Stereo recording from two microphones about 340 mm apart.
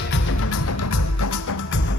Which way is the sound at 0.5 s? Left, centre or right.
Left.